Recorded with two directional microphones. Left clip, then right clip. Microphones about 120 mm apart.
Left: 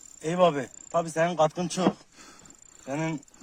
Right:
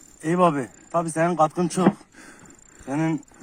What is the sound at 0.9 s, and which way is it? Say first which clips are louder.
Speech: right 3 dB; 15° left (ahead or behind).